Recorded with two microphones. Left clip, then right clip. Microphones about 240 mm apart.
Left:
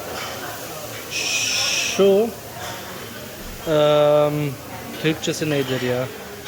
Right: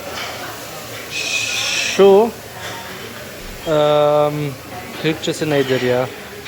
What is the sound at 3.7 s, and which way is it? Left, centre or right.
Speech, centre.